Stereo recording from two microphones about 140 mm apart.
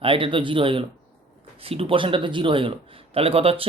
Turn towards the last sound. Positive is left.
turn(degrees=-45)  # may be behind; listen again after turning